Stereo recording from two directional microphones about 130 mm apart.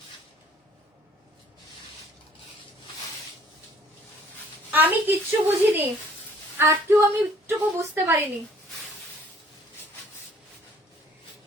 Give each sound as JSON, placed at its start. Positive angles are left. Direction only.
{"t": 4.7, "sound": "a woman's voice", "side_deg": -15}